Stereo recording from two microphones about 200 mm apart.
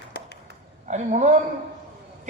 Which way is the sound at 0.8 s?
35° right (ahead or behind).